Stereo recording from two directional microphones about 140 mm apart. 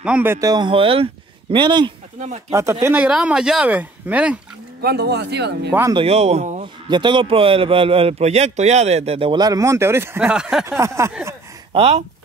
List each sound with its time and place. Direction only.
0.0 s speech: 10° right (ahead or behind)
0.5 s speech: 35° right (ahead or behind)
2.1 s speech: 60° right (ahead or behind)
2.5 s speech: 20° right (ahead or behind)
5.7 s a sound: 20° right (ahead or behind)
5.9 s speech: 50° right (ahead or behind)
6.6 s speech: 35° right (ahead or behind)
9.4 s speech: 25° right (ahead or behind); by 10.6 s 5° right (ahead or behind)
10.6 s a sound: 20° right (ahead or behind)
11.7 s speech: 45° right (ahead or behind)